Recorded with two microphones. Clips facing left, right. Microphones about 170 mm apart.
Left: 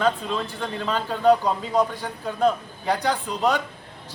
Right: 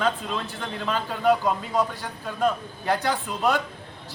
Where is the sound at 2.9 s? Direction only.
15° left (ahead or behind).